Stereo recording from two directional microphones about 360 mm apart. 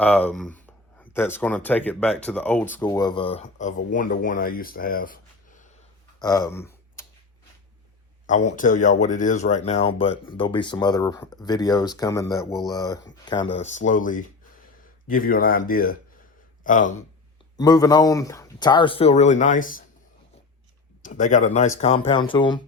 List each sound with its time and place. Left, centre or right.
0.0 s speech: centre; by 5.6 s left
6.1 s typing: centre
8.5 s speech: left
17.6 s speech: centre
21.0 s speech: left